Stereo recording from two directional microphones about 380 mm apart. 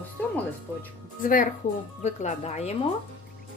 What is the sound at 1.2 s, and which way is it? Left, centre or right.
A woman's voice, left.